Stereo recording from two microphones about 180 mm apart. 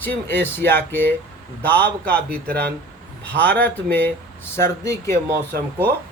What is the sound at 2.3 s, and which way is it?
Speech, 60° right (ahead or behind).